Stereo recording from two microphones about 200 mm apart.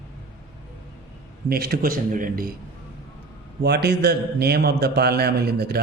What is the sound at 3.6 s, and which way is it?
A man's voice, 55° right (ahead or behind).